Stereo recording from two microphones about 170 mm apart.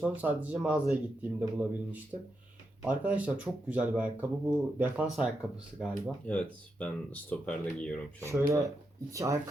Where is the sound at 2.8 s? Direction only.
10° right (ahead or behind); by 7.9 s 5° left (ahead or behind).